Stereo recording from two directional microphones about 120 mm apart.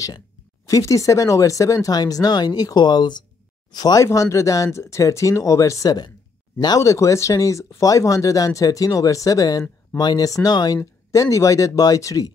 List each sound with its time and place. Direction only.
0.7 s speech: 30° left (ahead or behind)